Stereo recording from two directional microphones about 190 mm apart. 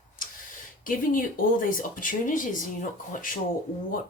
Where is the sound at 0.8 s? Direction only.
45° left (ahead or behind).